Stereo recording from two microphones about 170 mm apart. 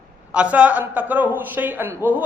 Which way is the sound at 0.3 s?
5° right (ahead or behind).